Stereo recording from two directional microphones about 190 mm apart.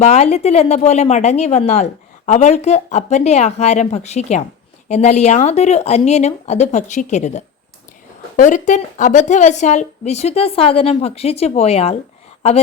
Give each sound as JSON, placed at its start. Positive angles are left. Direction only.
{"t": 0.0, "sound": "speech", "side_deg": 35}